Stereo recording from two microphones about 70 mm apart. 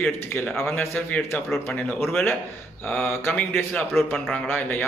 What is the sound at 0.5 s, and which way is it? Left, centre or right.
Speech, left.